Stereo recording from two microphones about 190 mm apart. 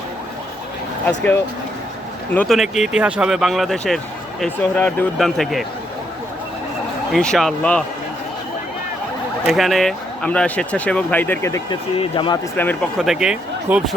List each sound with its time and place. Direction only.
1.0 s speech: 10° left (ahead or behind)
7.1 s speech: 5° left (ahead or behind)
9.5 s speech: centre (ahead or behind); by 11.8 s 15° left (ahead or behind)
11.9 s speech: 25° left (ahead or behind)
12.5 s speech: 10° left (ahead or behind)
13.0 s speech: 5° right (ahead or behind)